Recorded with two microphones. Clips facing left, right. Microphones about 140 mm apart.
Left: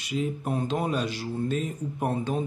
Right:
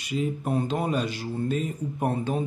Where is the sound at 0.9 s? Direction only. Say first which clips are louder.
Right 1 dB; 50° right (ahead or behind).